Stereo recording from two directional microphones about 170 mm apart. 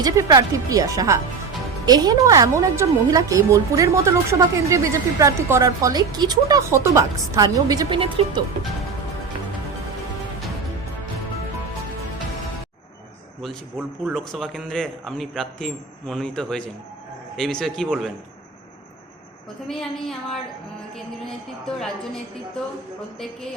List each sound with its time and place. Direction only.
0.0 s a woman's voice: 20° right (ahead or behind)
13.7 s a man's voice: centre (ahead or behind)
19.6 s a man's voice: centre (ahead or behind)